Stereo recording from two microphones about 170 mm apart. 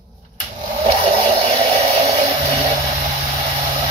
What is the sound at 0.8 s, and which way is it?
Hair dryer, 35° right (ahead or behind).